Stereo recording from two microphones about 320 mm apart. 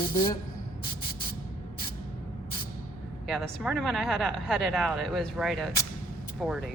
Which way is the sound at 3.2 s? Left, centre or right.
Centre.